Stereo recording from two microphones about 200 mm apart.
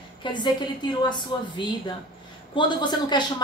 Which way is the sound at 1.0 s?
20° left (ahead or behind).